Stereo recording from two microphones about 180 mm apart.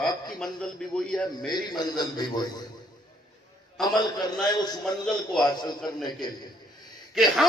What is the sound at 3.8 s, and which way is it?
Speech, 25° left (ahead or behind).